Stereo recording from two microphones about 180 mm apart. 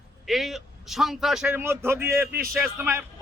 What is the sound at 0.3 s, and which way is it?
A man's voice, centre (ahead or behind).